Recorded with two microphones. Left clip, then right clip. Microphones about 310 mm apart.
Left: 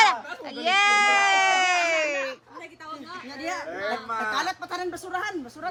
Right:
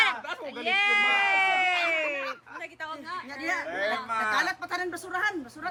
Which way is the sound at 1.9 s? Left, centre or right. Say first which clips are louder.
Left 3 dB; centre.